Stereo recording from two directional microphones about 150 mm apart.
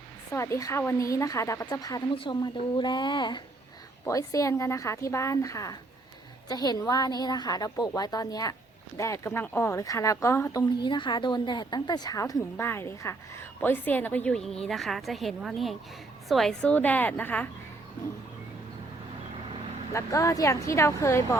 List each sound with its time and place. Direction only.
0.3 s a woman's voice: 20° left (ahead or behind)
19.9 s a woman's voice: 20° left (ahead or behind)